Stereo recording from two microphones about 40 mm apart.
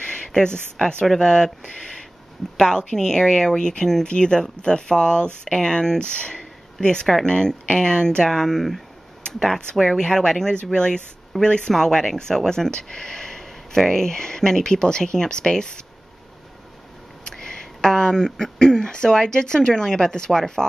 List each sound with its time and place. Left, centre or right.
0.0 s speech: centre
9.9 s speech: centre
17.2 s a sound: centre
18.4 s speech: centre